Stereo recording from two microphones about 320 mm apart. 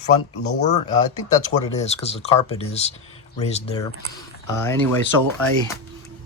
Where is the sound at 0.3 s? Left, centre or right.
Left.